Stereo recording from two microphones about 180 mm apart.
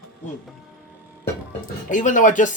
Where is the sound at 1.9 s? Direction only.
45° left (ahead or behind).